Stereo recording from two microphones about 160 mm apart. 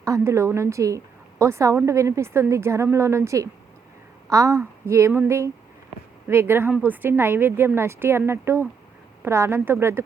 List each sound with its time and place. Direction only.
0.0 s a woman's voice: 20° right (ahead or behind)